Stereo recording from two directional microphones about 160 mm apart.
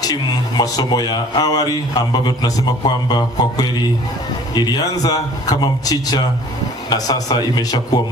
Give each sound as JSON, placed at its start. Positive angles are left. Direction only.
{"t": 0.0, "sound": "speech", "side_deg": 25}